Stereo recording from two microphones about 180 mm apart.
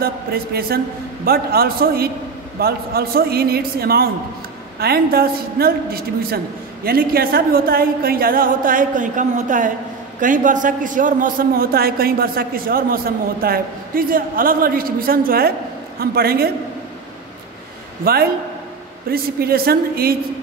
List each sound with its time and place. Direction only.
0.0 s a woman's voice: 55° right (ahead or behind)
18.0 s a woman's voice: 55° right (ahead or behind)